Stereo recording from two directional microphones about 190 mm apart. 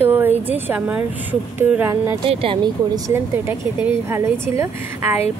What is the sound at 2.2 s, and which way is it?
Speech, 30° right (ahead or behind).